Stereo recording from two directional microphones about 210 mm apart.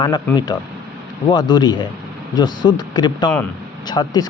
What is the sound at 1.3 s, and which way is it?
Speech, 20° left (ahead or behind).